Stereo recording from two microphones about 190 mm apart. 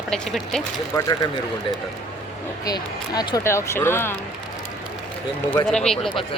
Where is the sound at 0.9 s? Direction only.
20° left (ahead or behind).